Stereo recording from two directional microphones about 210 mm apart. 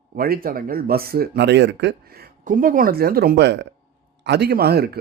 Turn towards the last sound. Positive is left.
turn(degrees=-50)  # may be behind; listen again after turning